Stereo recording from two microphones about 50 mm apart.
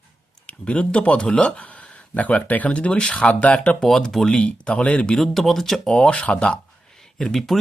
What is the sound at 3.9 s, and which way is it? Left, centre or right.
Speech, centre.